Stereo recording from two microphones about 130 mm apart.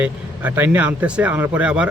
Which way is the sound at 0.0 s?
15° right (ahead or behind).